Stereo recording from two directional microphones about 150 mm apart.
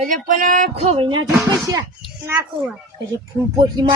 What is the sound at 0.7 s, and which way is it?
A child's voice, 40° right (ahead or behind).